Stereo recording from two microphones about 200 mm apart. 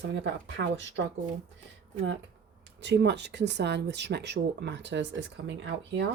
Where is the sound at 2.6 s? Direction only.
60° right (ahead or behind).